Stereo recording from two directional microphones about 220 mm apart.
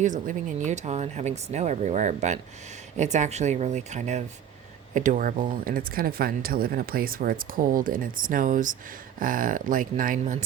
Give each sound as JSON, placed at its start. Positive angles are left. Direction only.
{"t": 0.0, "sound": "speech", "side_deg": -35}